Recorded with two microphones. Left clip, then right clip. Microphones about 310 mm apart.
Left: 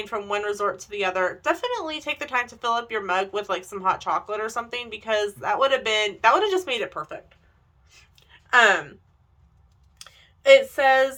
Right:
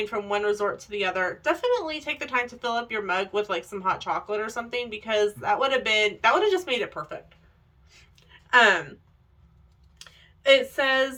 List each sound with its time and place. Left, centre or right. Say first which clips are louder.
0.0 s speech: right 1 dB; centre
7.9 s a sound: left 1 dB; centre
10.0 s speech: left 3 dB; centre